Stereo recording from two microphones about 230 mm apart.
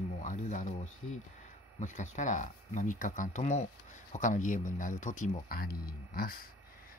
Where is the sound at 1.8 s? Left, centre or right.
Left.